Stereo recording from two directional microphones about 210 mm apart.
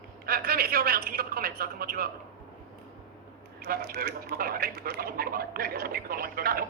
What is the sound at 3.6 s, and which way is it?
Speech, 45° right (ahead or behind).